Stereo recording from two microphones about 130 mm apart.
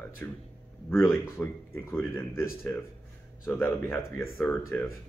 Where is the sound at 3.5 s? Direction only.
15° left (ahead or behind).